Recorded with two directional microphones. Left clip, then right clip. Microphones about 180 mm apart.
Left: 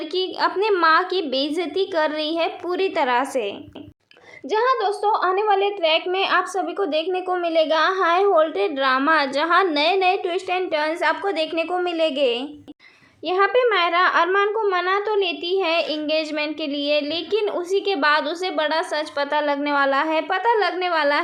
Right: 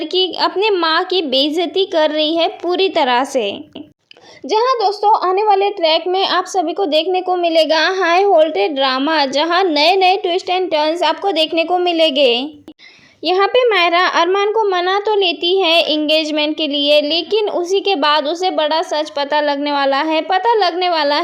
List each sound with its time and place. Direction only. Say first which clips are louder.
0.1 s a woman's voice: right 6 dB; 35° right (ahead or behind)